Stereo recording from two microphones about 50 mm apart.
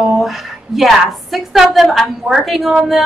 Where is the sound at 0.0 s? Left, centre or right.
Centre.